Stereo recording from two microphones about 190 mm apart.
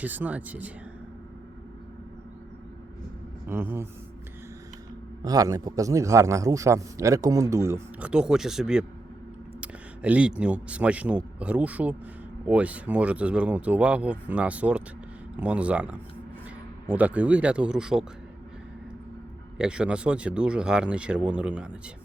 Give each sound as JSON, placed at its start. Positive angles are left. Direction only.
{"t": 0.0, "sound": "a man's voice", "side_deg": -10}
{"t": 3.4, "sound": "speech", "side_deg": -10}
{"t": 5.2, "sound": "a man's voice", "side_deg": -20}
{"t": 19.5, "sound": "speech", "side_deg": -5}